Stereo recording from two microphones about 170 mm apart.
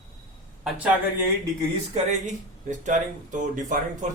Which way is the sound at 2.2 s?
45° right (ahead or behind).